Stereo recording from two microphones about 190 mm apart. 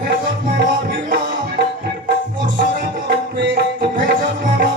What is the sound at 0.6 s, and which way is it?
Music, 60° right (ahead or behind).